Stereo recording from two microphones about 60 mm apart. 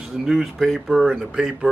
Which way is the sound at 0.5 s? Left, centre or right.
Centre.